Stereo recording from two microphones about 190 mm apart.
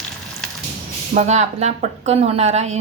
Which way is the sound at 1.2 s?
35° right (ahead or behind).